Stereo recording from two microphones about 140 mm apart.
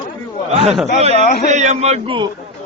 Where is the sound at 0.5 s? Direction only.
50° right (ahead or behind).